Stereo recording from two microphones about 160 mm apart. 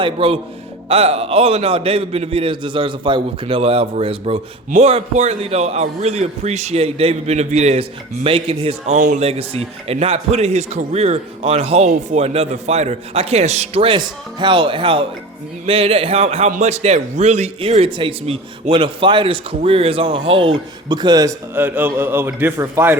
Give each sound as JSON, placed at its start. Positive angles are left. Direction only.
{"t": 0.0, "sound": "a man's voice", "side_deg": -35}
{"t": 9.0, "sound": "speech", "side_deg": -55}
{"t": 9.2, "sound": "a man's voice", "side_deg": -40}